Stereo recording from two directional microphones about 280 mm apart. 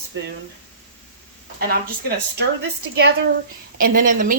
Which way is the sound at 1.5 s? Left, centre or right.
Right.